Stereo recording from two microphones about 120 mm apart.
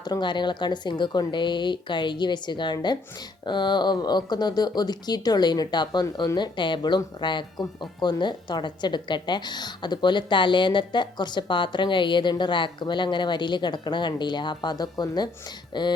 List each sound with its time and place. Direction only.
0.0 s speech: 40° left (ahead or behind)